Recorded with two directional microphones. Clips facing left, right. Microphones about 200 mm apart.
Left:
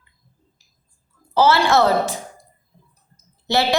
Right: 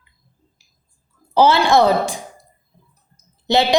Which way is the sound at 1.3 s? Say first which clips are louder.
Right 2 dB; 15° right (ahead or behind).